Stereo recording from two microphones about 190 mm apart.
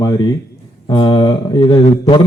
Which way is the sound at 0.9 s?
20° left (ahead or behind).